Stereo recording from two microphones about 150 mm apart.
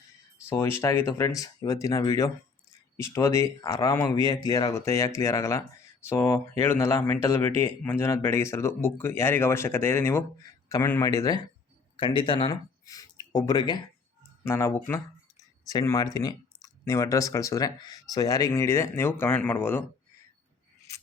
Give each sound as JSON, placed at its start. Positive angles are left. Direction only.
{"t": 0.4, "sound": "speech", "side_deg": 20}